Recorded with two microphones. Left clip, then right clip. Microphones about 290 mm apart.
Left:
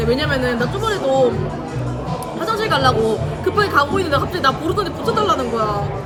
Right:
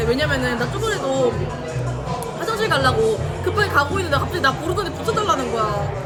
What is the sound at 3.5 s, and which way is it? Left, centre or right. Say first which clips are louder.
Speech: left 3 dB; centre.